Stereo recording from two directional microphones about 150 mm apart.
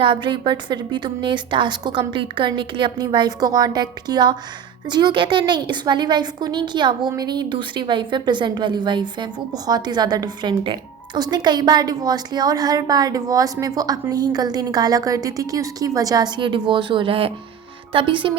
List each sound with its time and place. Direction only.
0.0 s a woman's voice: 30° right (ahead or behind)